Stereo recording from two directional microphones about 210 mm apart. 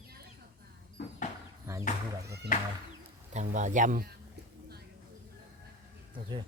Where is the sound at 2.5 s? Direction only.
40° left (ahead or behind).